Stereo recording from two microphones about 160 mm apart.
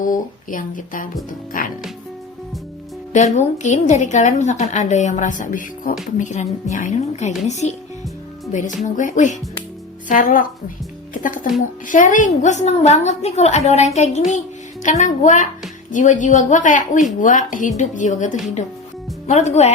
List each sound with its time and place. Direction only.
0.0 s speech: 55° left (ahead or behind)
3.1 s a woman's voice: 50° left (ahead or behind)
8.8 s a woman's voice: 50° left (ahead or behind)
19.3 s a woman's voice: 45° left (ahead or behind)